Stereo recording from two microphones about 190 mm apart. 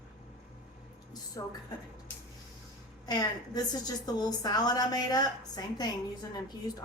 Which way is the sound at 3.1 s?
20° left (ahead or behind).